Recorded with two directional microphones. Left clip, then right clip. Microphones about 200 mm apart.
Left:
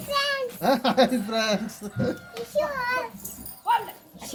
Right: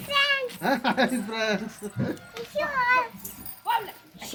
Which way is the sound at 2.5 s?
15° left (ahead or behind).